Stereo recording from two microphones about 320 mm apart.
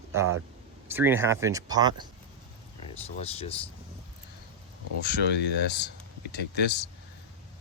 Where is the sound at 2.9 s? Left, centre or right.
Centre.